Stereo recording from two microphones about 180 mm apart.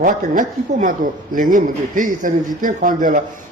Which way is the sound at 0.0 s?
45° right (ahead or behind).